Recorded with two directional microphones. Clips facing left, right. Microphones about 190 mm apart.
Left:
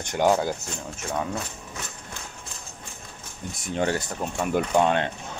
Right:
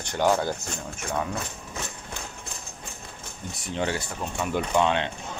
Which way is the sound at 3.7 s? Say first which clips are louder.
Left 3 dB; 45° left (ahead or behind).